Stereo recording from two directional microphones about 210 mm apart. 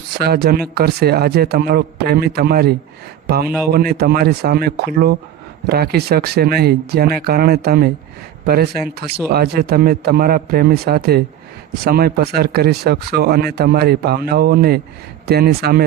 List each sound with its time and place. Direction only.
0.2 s speech: 50° right (ahead or behind)